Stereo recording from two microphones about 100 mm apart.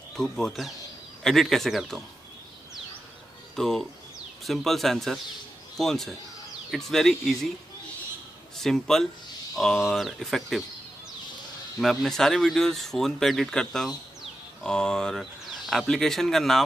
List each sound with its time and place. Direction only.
0.1 s speech: 5° left (ahead or behind)
3.5 s speech: 5° left (ahead or behind)
8.5 s speech: 5° left (ahead or behind)
11.8 s speech: centre (ahead or behind)